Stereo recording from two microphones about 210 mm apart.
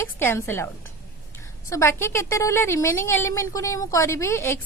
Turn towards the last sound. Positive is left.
turn(degrees=10)  # may be behind; listen again after turning